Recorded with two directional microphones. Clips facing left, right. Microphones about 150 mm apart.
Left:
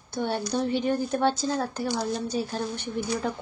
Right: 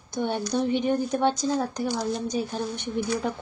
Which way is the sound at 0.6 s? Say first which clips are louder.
Right 2 dB; 20° right (ahead or behind).